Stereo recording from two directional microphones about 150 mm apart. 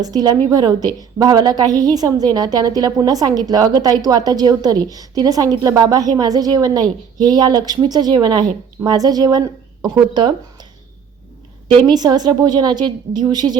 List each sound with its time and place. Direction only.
0.0 s a woman's voice: 25° right (ahead or behind)
11.7 s a woman's voice: 30° right (ahead or behind)